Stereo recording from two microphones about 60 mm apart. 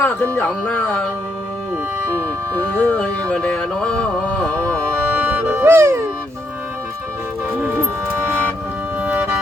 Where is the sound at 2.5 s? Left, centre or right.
Left.